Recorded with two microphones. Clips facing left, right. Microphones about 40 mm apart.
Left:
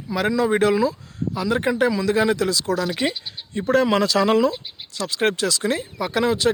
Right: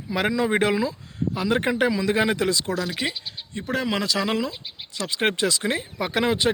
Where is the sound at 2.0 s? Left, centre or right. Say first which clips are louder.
Left 2 dB; right.